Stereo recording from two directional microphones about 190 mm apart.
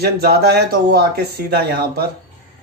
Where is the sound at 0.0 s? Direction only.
55° right (ahead or behind).